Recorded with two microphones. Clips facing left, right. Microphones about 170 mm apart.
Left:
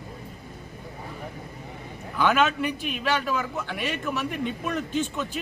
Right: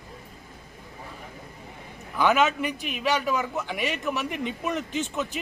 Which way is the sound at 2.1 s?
10° right (ahead or behind).